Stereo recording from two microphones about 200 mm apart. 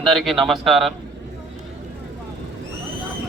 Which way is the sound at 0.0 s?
Centre (ahead or behind).